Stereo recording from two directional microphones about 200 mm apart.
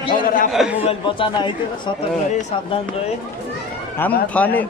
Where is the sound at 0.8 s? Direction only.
25° left (ahead or behind).